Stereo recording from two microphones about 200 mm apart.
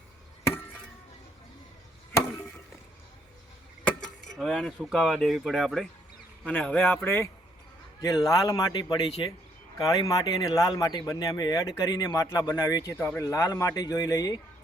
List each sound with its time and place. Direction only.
4.3 s speech: centre (ahead or behind)
8.3 s speech: 15° left (ahead or behind)